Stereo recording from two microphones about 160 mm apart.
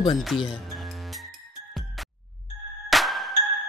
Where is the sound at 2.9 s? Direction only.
Centre (ahead or behind).